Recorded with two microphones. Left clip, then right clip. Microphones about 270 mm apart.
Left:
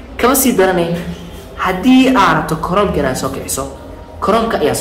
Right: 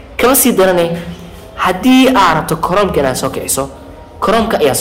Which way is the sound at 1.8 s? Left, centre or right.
Right.